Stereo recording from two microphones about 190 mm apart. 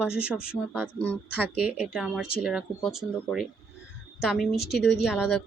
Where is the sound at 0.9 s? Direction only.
10° left (ahead or behind).